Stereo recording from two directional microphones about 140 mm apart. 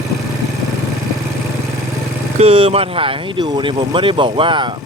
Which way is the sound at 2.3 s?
45° right (ahead or behind).